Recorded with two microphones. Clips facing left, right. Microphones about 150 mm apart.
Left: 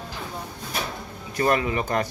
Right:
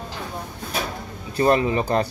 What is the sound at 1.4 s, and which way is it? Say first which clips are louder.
Speech: right 4 dB; 30° right (ahead or behind).